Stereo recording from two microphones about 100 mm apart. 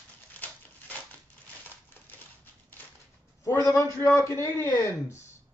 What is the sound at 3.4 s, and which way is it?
A man's voice, 30° left (ahead or behind).